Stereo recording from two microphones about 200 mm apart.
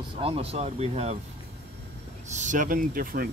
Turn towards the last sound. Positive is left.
turn(degrees=-45)  # may be behind; listen again after turning